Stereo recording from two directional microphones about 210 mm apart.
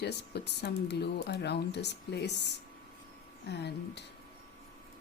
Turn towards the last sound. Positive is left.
turn(degrees=55)  # may be behind; listen again after turning